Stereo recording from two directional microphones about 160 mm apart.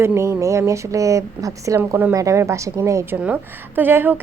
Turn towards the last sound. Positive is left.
turn(degrees=-15)  # may be behind; listen again after turning